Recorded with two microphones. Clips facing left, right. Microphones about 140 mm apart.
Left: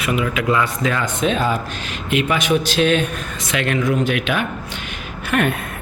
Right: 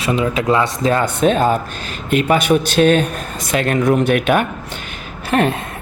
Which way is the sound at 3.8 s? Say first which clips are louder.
Right 5 dB; 65° right (ahead or behind).